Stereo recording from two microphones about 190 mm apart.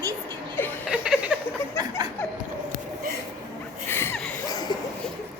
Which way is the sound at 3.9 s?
10° left (ahead or behind).